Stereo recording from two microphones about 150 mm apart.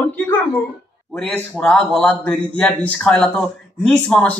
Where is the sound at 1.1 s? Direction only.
10° left (ahead or behind).